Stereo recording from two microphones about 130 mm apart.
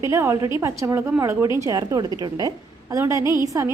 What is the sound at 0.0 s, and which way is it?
A woman's voice, 20° right (ahead or behind).